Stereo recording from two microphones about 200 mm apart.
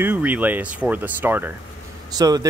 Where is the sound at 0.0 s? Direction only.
10° right (ahead or behind).